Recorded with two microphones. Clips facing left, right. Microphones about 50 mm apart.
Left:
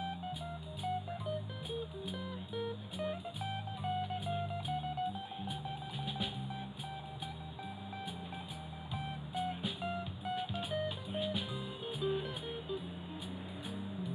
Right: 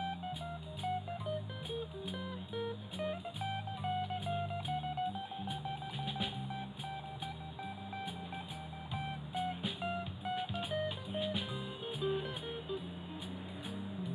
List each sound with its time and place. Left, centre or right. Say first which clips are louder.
0.8 s music: even; right
5.5 s cash register: right 1 dB; right
8.9 s music: even; right